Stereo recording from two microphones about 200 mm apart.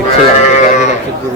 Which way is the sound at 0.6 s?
35° left (ahead or behind).